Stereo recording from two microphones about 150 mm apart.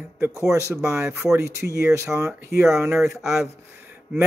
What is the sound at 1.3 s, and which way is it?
Speech, 20° right (ahead or behind).